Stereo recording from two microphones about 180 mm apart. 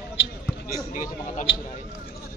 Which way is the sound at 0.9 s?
45° left (ahead or behind).